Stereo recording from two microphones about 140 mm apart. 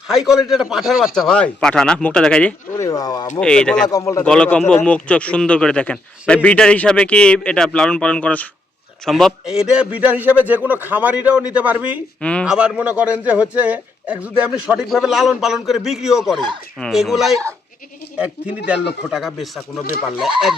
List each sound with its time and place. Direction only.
0.1 s a man's voice: 5° right (ahead or behind)
2.7 s speech: 25° left (ahead or behind)
3.4 s a man's voice: 5° left (ahead or behind)
3.8 s speech: 25° left (ahead or behind)
4.2 s a man's voice: 10° left (ahead or behind); by 11.9 s 10° right (ahead or behind)
12.2 s a man's voice: 10° left (ahead or behind)
12.5 s a man's voice: 5° right (ahead or behind)